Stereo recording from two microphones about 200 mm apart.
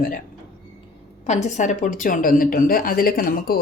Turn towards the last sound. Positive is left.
turn(degrees=50)  # may be behind; listen again after turning